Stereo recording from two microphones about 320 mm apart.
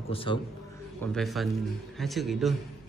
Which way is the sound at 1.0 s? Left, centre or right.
Centre.